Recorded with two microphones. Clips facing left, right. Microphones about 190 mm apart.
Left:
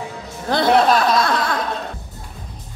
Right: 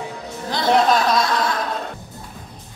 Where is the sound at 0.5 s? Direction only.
55° left (ahead or behind).